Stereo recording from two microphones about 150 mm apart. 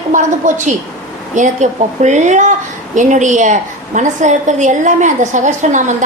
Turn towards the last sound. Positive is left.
turn(degrees=-55)  # may be behind; listen again after turning